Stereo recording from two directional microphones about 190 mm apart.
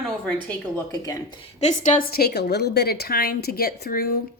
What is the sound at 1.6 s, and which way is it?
A woman's voice, 40° left (ahead or behind).